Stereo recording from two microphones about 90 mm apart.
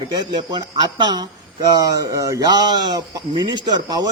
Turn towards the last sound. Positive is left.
turn(degrees=-45)  # may be behind; listen again after turning